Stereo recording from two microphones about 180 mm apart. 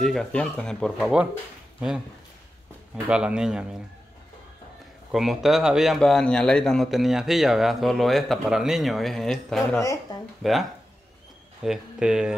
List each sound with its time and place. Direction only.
0.0 s speech: 5° left (ahead or behind)
3.1 s speech: 5° right (ahead or behind)
5.1 s speech: centre (ahead or behind)